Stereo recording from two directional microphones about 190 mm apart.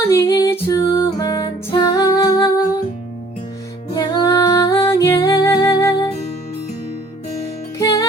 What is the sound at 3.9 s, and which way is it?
Music, 25° left (ahead or behind).